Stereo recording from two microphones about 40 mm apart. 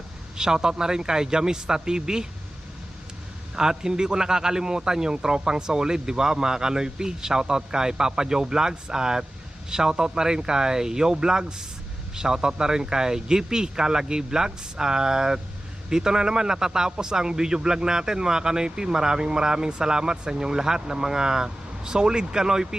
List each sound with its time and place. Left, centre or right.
0.3 s speech: centre
3.5 s speech: centre